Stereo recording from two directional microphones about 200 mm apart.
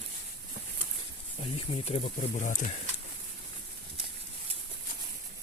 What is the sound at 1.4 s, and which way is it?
Speech, 25° left (ahead or behind).